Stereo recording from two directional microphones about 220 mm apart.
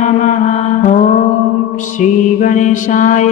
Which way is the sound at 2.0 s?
35° left (ahead or behind).